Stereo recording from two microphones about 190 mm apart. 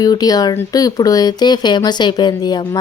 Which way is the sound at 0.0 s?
20° left (ahead or behind).